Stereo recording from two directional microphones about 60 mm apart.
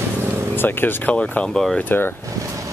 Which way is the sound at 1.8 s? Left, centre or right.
Left.